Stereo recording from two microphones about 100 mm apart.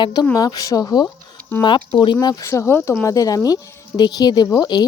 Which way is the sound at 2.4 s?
30° left (ahead or behind).